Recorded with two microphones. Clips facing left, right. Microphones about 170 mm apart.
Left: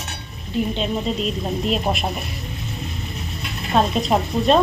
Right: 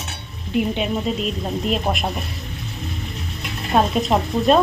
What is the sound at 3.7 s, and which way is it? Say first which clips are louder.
Speech: right 1 dB; centre (ahead or behind).